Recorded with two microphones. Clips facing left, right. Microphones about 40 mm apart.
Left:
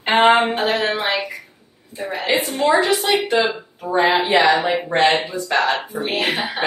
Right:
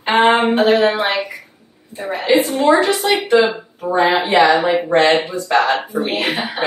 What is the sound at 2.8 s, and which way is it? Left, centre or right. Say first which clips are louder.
Speech: right 2 dB; centre.